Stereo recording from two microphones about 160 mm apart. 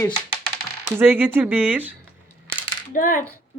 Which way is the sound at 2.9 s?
55° left (ahead or behind).